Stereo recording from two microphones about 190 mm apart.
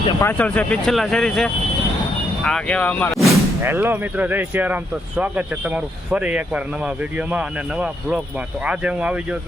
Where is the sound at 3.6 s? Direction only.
10° right (ahead or behind).